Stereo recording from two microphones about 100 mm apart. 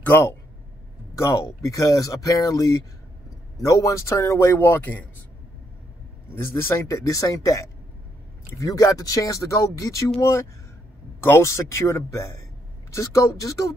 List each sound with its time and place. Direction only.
0.1 s speech: 25° left (ahead or behind)
3.7 s speech: 30° left (ahead or behind)
6.4 s speech: 25° left (ahead or behind)
11.2 s speech: 25° left (ahead or behind)